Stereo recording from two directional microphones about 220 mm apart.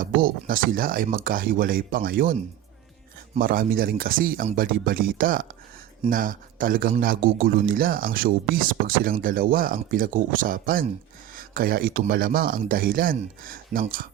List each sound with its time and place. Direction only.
0.0 s a man's voice: 40° right (ahead or behind)
3.3 s a man's voice: 40° right (ahead or behind)